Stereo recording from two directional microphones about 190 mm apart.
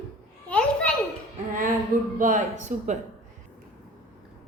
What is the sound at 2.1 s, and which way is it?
Speech, 45° right (ahead or behind).